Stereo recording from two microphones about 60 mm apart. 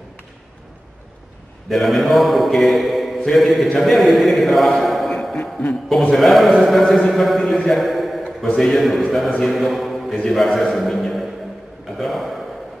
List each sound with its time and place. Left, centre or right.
1.7 s a man's voice: centre
3.8 s chant: centre
5.4 s a sound: left
6.1 s a man's voice: centre
9.5 s mantra: centre
10.1 s a man's voice: centre